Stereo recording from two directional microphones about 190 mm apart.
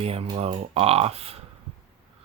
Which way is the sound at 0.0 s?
30° right (ahead or behind).